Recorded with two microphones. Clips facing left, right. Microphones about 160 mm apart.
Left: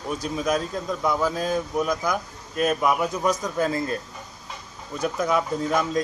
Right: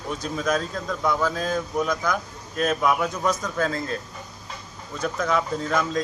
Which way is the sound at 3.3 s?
15° left (ahead or behind).